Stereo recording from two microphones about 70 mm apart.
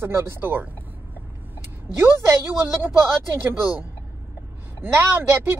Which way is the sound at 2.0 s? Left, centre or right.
Right.